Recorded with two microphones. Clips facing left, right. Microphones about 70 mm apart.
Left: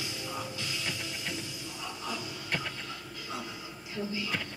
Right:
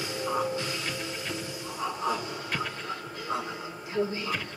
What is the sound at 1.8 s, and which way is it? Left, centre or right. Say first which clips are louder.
Music: right 9 dB; right.